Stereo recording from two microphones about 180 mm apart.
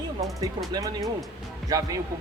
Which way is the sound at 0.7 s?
20° right (ahead or behind).